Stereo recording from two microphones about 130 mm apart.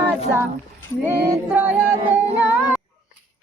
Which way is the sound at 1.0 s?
20° right (ahead or behind).